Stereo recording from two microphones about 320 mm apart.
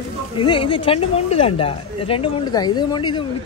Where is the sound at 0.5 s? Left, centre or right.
Centre.